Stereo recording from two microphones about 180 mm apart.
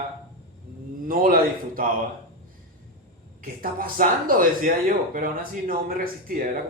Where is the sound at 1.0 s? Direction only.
50° right (ahead or behind).